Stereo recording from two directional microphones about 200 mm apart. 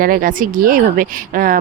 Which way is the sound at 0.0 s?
45° right (ahead or behind).